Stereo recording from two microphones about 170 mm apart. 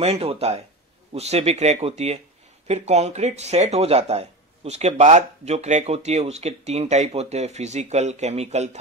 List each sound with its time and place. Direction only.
0.0 s speech: 35° right (ahead or behind)